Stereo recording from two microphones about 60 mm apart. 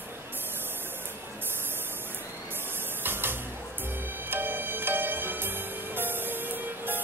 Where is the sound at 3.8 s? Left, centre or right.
Right.